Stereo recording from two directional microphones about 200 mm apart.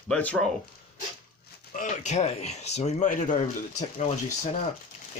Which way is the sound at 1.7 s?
40° left (ahead or behind).